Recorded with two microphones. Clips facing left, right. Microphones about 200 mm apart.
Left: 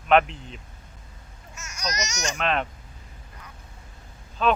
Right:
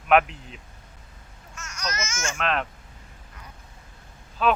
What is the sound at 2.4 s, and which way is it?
Speech, centre (ahead or behind).